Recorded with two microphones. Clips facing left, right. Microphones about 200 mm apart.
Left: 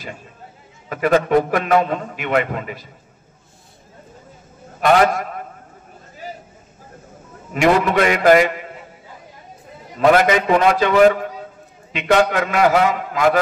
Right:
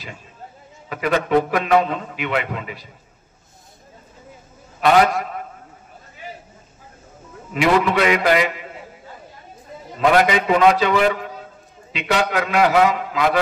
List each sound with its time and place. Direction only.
0.8 s a man's voice: 45° left (ahead or behind)
4.7 s a man's voice: 45° left (ahead or behind)
7.5 s a man's voice: 45° left (ahead or behind)
9.9 s a man's voice: 45° left (ahead or behind)